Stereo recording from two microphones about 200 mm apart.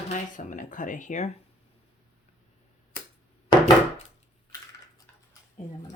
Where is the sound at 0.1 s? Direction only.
40° left (ahead or behind).